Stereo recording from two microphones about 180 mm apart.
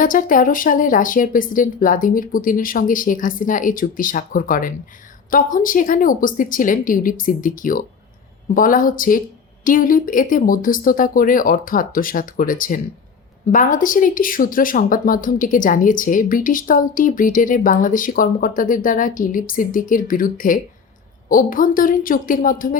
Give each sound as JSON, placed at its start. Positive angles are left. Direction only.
{"t": 0.0, "sound": "speech", "side_deg": 50}